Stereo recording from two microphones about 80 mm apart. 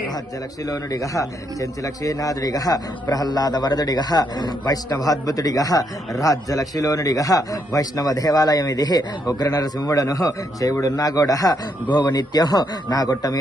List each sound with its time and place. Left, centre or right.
0.6 s a man's voice: left
11.9 s speech: left